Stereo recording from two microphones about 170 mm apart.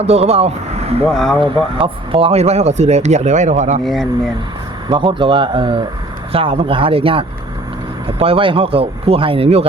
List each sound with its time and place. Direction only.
0.0 s speech: 40° right (ahead or behind)
1.0 s speech: centre (ahead or behind)
1.8 s speech: 35° right (ahead or behind)
3.8 s speech: centre (ahead or behind)
4.9 s speech: 30° right (ahead or behind)